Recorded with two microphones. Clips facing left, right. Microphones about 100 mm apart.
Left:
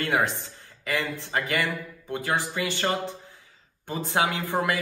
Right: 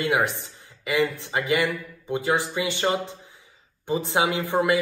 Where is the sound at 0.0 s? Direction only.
15° right (ahead or behind).